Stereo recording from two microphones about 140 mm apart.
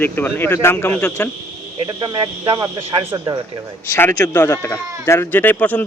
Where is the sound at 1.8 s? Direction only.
30° right (ahead or behind).